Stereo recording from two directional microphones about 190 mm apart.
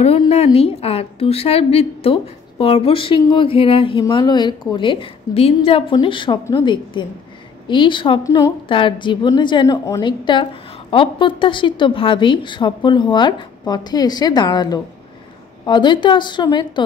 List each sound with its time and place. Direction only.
0.0 s a woman's voice: 30° left (ahead or behind)